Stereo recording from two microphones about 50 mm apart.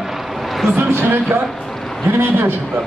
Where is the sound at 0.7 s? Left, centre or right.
Right.